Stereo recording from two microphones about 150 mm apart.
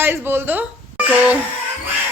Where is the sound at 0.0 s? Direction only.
15° right (ahead or behind).